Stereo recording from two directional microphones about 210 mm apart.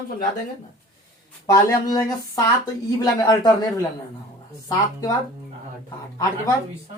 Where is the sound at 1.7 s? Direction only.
15° left (ahead or behind).